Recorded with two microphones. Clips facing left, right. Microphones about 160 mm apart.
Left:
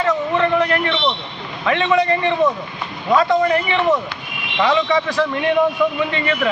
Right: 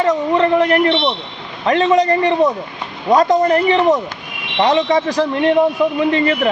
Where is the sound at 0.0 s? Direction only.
35° right (ahead or behind).